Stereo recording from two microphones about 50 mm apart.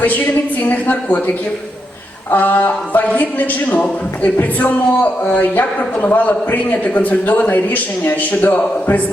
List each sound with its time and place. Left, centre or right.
0.6 s a man's voice: left
2.3 s a man's voice: left